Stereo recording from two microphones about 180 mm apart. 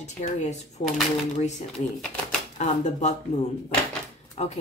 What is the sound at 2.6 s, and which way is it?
Speech, 40° left (ahead or behind).